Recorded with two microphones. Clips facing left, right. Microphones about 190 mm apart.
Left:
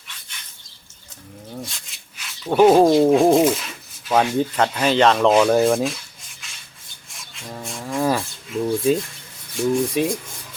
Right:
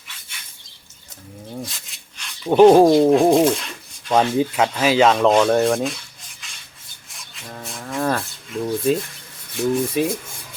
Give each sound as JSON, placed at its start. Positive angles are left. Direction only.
{"t": 1.6, "sound": "a sound", "side_deg": 0}
{"t": 2.7, "sound": "speech", "side_deg": 0}
{"t": 4.4, "sound": "speech", "side_deg": -5}
{"t": 6.4, "sound": "filing", "side_deg": 0}
{"t": 7.1, "sound": "speech", "side_deg": 0}